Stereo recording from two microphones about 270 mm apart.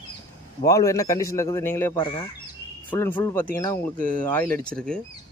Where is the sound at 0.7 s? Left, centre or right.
Centre.